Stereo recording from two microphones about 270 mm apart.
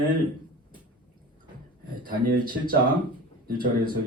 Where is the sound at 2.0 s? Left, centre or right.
Right.